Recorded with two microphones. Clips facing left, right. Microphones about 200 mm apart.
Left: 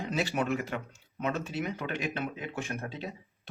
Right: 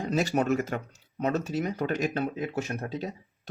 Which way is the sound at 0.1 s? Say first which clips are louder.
Right 5 dB; 40° right (ahead or behind).